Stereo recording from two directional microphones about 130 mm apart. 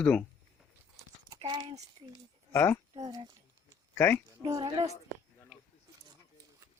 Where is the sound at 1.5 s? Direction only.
35° right (ahead or behind).